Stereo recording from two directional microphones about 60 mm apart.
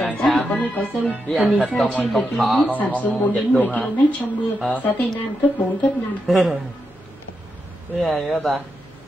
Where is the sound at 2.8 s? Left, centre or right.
Left.